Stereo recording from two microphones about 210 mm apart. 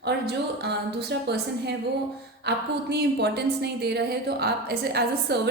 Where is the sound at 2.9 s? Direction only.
50° right (ahead or behind).